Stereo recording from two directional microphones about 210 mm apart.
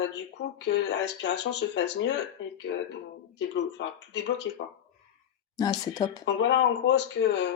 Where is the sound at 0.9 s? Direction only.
55° left (ahead or behind).